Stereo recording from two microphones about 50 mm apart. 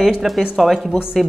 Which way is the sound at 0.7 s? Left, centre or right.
Centre.